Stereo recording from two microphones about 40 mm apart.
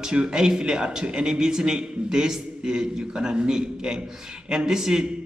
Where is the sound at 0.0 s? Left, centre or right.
Right.